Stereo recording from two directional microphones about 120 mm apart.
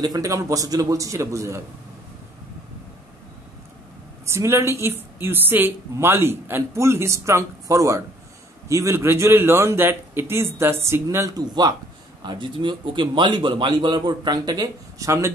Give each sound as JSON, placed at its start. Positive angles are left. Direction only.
{"t": 0.0, "sound": "a woman's voice", "side_deg": -30}
{"t": 4.3, "sound": "a woman's voice", "side_deg": -20}